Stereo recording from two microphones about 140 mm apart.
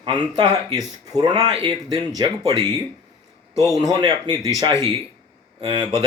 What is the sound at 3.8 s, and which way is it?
Speech, 25° right (ahead or behind).